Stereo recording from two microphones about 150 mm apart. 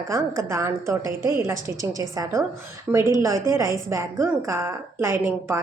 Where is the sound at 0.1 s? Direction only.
20° right (ahead or behind).